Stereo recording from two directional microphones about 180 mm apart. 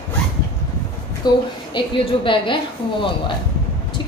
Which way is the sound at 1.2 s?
25° left (ahead or behind).